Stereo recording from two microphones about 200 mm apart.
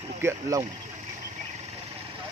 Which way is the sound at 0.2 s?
15° right (ahead or behind).